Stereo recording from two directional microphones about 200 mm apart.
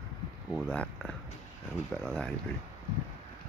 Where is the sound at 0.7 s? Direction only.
5° left (ahead or behind).